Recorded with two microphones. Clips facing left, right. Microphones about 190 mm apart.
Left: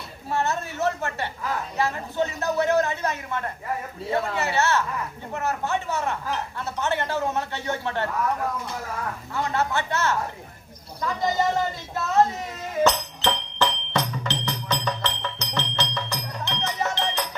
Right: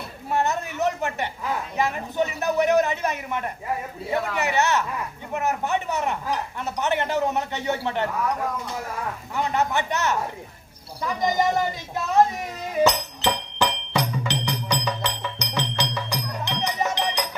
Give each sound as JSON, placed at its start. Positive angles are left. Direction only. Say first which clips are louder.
{"t": 0.3, "sound": "a sound", "louder": "right 2 dB", "side_deg": -15}
{"t": 1.8, "sound": "speech", "louder": "right 1 dB", "side_deg": -15}
{"t": 9.3, "sound": "speech", "louder": "right 2 dB", "side_deg": -15}
{"t": 12.7, "sound": "music", "louder": "right 1 dB", "side_deg": -15}